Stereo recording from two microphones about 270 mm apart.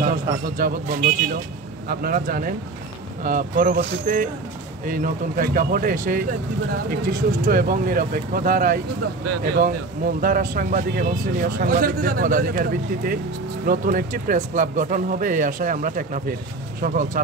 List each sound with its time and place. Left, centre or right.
0.1 s speech: right